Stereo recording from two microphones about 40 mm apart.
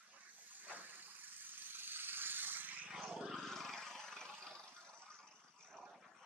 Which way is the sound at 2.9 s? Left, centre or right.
Centre.